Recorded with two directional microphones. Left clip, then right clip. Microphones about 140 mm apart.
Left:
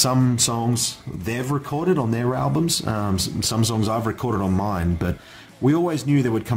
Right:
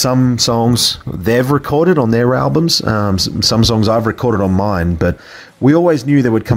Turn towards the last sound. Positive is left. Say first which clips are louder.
# right 9 dB
turn(degrees=-40)  # may be behind; listen again after turning